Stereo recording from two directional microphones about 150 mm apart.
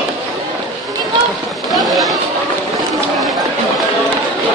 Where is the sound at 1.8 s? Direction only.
Centre (ahead or behind).